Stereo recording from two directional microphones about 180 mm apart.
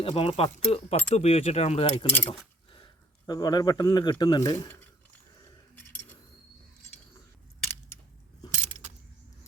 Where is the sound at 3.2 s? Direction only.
20° left (ahead or behind).